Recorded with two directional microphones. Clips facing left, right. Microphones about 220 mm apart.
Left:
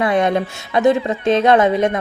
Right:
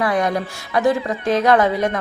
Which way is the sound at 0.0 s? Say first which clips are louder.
Left 3 dB; 25° left (ahead or behind).